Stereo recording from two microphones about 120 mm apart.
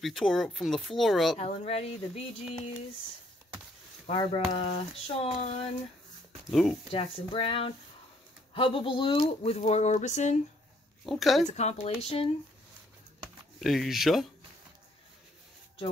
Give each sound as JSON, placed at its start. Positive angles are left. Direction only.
{"t": 0.0, "sound": "speech", "side_deg": 0}
{"t": 1.4, "sound": "speech", "side_deg": 65}
{"t": 4.1, "sound": "speech", "side_deg": 50}
{"t": 6.5, "sound": "speech", "side_deg": 0}
{"t": 6.9, "sound": "speech", "side_deg": 50}
{"t": 11.1, "sound": "speech", "side_deg": 0}
{"t": 11.5, "sound": "speech", "side_deg": 65}
{"t": 13.6, "sound": "speech", "side_deg": 0}